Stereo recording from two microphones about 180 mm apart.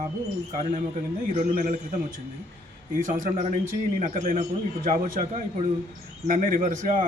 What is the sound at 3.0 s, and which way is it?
A man's voice, 40° right (ahead or behind).